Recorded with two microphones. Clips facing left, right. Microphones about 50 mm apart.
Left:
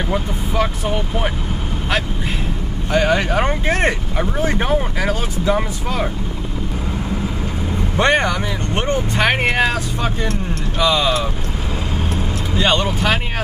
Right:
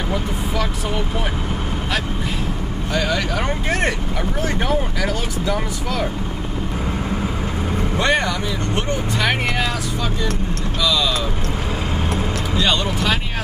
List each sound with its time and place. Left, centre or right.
0.1 s speech: left
2.9 s speech: left
8.0 s speech: left
12.5 s speech: left